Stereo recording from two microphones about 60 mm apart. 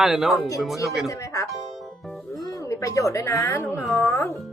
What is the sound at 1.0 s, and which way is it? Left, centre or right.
Speech, left.